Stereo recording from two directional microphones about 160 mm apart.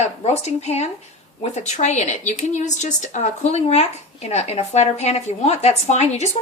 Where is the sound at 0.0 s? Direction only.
45° left (ahead or behind).